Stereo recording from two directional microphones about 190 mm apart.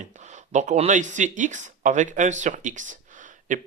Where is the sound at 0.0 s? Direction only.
40° right (ahead or behind).